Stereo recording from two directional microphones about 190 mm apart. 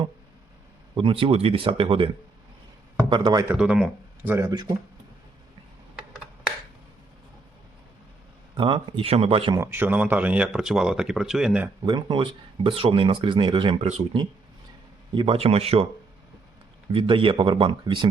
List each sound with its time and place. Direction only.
0.9 s speech: 30° right (ahead or behind)
3.1 s speech: 25° right (ahead or behind)
3.5 s speech: 5° right (ahead or behind)
8.5 s speech: 25° right (ahead or behind)
9.6 s speech: 10° right (ahead or behind)
11.9 s speech: 25° right (ahead or behind)
16.9 s speech: 25° right (ahead or behind)